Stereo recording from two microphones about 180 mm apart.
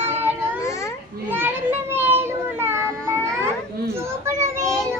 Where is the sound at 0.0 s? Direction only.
10° right (ahead or behind).